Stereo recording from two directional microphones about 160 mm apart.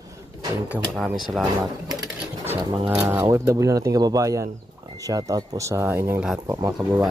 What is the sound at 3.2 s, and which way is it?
Speech, 20° right (ahead or behind).